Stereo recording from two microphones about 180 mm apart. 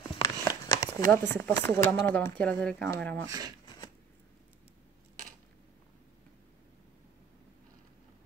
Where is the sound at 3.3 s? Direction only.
20° right (ahead or behind).